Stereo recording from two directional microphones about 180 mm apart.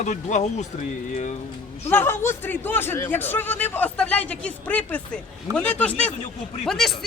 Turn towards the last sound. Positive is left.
turn(degrees=0)  # may be behind; listen again after turning